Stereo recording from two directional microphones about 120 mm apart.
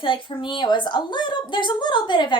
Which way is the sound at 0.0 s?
40° left (ahead or behind).